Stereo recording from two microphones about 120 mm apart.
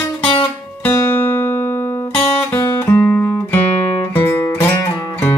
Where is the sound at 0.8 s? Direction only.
20° left (ahead or behind).